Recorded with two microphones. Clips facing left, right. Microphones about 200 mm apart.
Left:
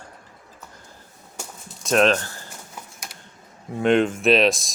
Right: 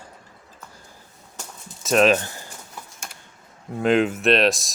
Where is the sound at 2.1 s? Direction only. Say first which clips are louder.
Right 3 dB; 15° right (ahead or behind).